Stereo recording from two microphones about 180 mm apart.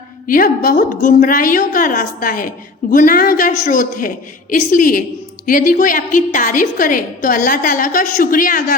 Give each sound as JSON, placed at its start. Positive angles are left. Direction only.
{"t": 0.3, "sound": "a woman's voice", "side_deg": 50}